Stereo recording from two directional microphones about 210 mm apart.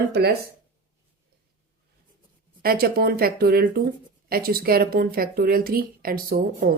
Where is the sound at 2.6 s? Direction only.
45° right (ahead or behind).